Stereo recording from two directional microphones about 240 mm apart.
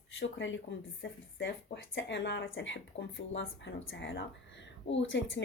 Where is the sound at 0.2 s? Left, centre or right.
Left.